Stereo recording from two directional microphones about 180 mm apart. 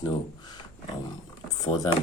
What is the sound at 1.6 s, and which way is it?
Speech, 20° left (ahead or behind).